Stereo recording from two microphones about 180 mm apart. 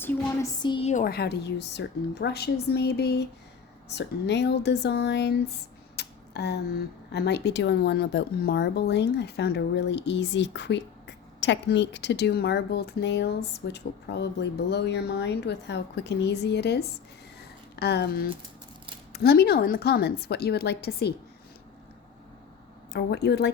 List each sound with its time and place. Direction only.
0.0 s a sound: 10° left (ahead or behind)
0.6 s a woman's voice: 25° left (ahead or behind)
0.9 s a woman's voice: 45° left (ahead or behind)
1.1 s speech: 65° left (ahead or behind)
6.0 s a sound: 65° left (ahead or behind)
7.1 s speech: 65° left (ahead or behind)
22.9 s speech: 65° left (ahead or behind)